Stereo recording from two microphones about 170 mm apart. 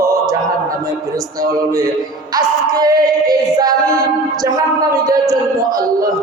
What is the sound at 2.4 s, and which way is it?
Music, 20° right (ahead or behind).